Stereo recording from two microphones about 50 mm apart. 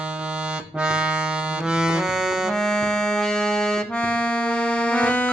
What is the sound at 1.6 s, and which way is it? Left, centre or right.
Accordion, centre.